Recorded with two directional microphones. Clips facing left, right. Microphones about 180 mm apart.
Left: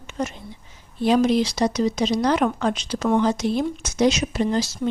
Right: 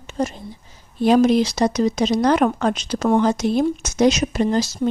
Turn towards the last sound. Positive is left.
turn(degrees=-45)  # may be behind; listen again after turning